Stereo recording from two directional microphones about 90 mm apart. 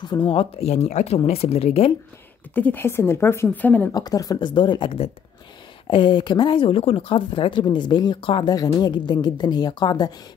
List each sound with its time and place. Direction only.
0.1 s a woman's voice: 40° left (ahead or behind)
1.1 s speech: 90° left
2.5 s a woman's voice: 20° left (ahead or behind)
3.9 s a woman's voice: 45° left (ahead or behind)
4.4 s speech: 60° left (ahead or behind); by 5.1 s 80° left
5.9 s speech: 65° left (ahead or behind)
8.2 s speech: 70° left (ahead or behind)
8.5 s a woman's voice: 50° left (ahead or behind)